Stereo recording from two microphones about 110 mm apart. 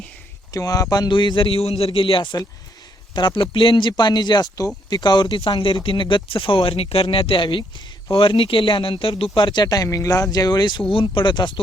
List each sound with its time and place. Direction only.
0.5 s speech: 30° left (ahead or behind)
5.4 s speech: 50° left (ahead or behind)